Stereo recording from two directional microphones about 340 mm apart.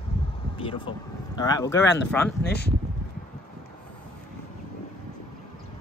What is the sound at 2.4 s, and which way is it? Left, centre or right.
Speech, left.